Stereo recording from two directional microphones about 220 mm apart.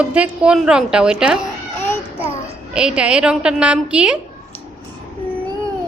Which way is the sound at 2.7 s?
5° right (ahead or behind).